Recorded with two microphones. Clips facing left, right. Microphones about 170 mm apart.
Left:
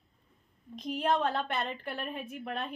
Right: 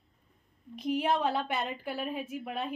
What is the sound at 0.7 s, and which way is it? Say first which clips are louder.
A woman's voice: right 1 dB; 10° right (ahead or behind).